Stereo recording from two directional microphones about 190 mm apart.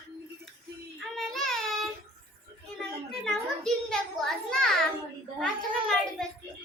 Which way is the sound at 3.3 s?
Centre (ahead or behind).